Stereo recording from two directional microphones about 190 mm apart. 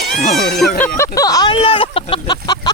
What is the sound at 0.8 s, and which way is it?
Speech, 15° left (ahead or behind).